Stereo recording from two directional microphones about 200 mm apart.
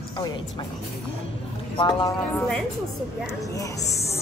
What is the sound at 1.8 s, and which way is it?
Speech, 20° left (ahead or behind).